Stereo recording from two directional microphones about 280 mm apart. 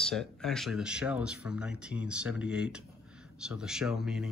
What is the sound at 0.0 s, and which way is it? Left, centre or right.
Speech, centre.